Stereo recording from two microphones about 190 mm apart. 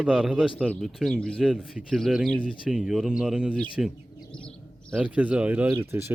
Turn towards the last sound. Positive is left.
turn(degrees=-15)  # may be behind; listen again after turning